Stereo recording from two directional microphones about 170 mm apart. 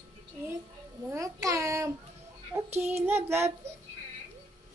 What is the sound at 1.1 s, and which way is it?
Speech, 20° right (ahead or behind).